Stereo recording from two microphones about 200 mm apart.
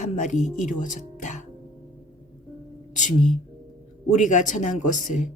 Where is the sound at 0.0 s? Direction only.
35° left (ahead or behind).